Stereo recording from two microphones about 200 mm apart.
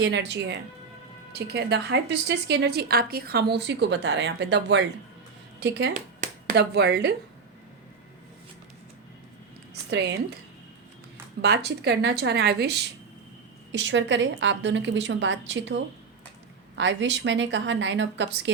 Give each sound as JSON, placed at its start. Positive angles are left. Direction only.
{"t": 0.0, "sound": "a woman's voice", "side_deg": -60}
{"t": 6.1, "sound": "a sound", "side_deg": -55}
{"t": 9.9, "sound": "a woman's voice", "side_deg": -60}
{"t": 11.4, "sound": "a woman's voice", "side_deg": -55}
{"t": 13.7, "sound": "a woman's voice", "side_deg": -65}